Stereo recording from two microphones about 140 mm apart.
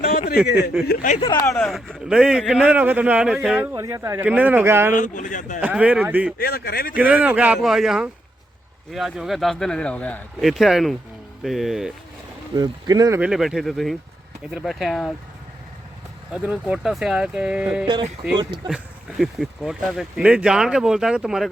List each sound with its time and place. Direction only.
0.3 s speech: 5° right (ahead or behind)
0.9 s speech: 65° left (ahead or behind)
1.5 s a man's voice: 5° left (ahead or behind)
3.8 s a man's voice: 20° right (ahead or behind)
4.9 s speech: 65° left (ahead or behind)
5.5 s a man's voice: 10° right (ahead or behind)
6.4 s speech: 90° left
6.9 s a man's voice: 10° right (ahead or behind); by 10.2 s 10° left (ahead or behind)
10.4 s speech: centre (ahead or behind)
12.5 s speech: 30° right (ahead or behind)
13.1 s speech: 5° right (ahead or behind)
16.3 s speech: 10° right (ahead or behind)
18.3 s speech: 30° right (ahead or behind)
19.2 s speech: centre (ahead or behind)